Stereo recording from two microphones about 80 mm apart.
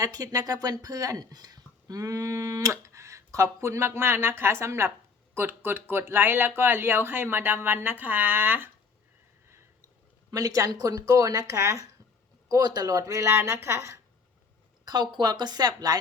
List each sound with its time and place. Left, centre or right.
0.0 s speech: right
10.3 s speech: right
12.5 s speech: right
14.8 s speech: right